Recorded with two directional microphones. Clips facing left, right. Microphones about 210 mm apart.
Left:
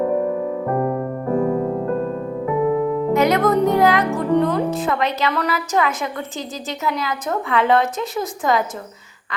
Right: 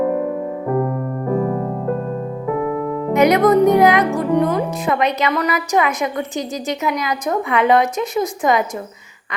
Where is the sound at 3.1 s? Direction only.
20° right (ahead or behind).